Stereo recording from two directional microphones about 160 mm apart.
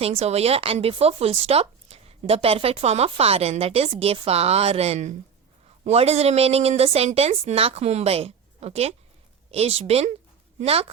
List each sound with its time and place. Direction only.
0.0 s a woman's voice: 40° right (ahead or behind)